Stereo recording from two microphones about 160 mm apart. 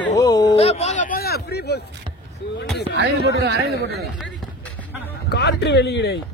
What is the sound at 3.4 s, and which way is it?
Speech, 90° right.